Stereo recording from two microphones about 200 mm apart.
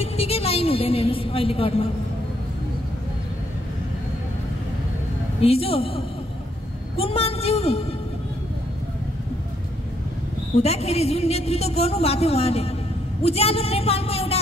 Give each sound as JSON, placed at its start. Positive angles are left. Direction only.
{"t": 0.0, "sound": "a sound", "side_deg": 30}
{"t": 5.4, "sound": "a woman's voice", "side_deg": 30}
{"t": 10.6, "sound": "a woman's voice", "side_deg": 30}